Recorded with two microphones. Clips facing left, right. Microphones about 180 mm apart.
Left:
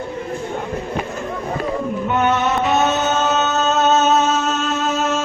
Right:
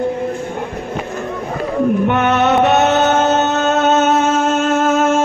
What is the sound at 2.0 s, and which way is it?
Music, 70° right (ahead or behind).